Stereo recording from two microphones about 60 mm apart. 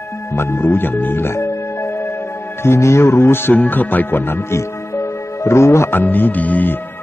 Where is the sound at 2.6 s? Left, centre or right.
Left.